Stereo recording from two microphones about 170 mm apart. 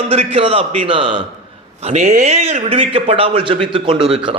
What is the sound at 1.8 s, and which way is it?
A man's voice, 40° right (ahead or behind).